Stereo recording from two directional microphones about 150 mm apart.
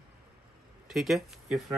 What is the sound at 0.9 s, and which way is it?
Speech, centre (ahead or behind).